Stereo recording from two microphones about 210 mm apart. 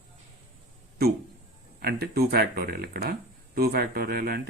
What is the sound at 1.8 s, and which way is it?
Speech, 50° right (ahead or behind).